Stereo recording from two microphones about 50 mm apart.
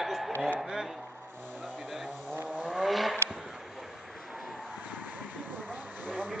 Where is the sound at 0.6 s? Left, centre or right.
Centre.